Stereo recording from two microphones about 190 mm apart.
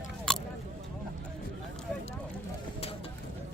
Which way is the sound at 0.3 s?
5° left (ahead or behind).